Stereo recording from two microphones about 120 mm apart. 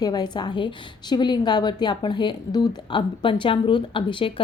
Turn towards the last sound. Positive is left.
turn(degrees=45)  # may be behind; listen again after turning